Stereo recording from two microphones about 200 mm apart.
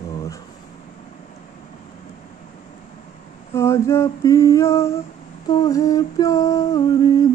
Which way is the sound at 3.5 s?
15° left (ahead or behind).